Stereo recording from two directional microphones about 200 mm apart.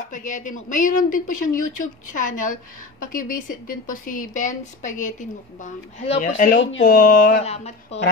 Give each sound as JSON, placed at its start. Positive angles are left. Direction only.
{"t": 0.1, "sound": "a woman's voice", "side_deg": 40}
{"t": 7.4, "sound": "a woman's voice", "side_deg": 30}